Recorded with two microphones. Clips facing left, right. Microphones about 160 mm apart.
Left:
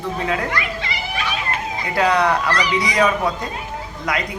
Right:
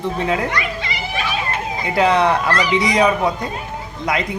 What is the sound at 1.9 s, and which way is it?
Speech, 25° right (ahead or behind).